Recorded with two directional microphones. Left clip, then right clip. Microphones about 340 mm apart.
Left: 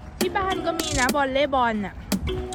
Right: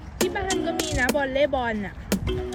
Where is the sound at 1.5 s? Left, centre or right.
Left.